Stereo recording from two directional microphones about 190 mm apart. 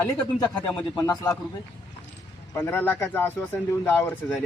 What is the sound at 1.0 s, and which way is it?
Speech, 20° left (ahead or behind).